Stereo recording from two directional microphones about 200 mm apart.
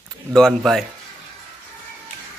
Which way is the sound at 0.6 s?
Centre (ahead or behind).